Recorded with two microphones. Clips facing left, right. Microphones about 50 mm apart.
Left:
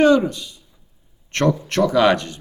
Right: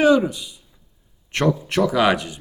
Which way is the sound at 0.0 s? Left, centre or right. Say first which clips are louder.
Left 1 dB; centre.